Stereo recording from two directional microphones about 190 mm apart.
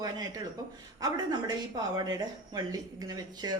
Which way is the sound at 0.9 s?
20° right (ahead or behind).